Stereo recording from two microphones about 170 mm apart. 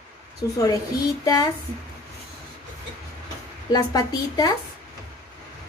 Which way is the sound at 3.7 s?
20° left (ahead or behind).